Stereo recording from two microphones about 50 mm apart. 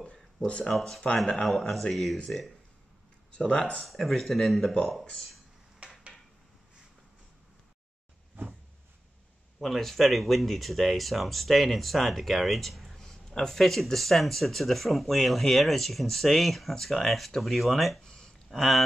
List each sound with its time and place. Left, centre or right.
0.0 s a sound: left
0.7 s speech: centre
3.3 s speech: left
3.8 s speech: centre
5.8 s dishes: right
9.6 s speech: centre
12.9 s speech: centre
18.0 s a sound: centre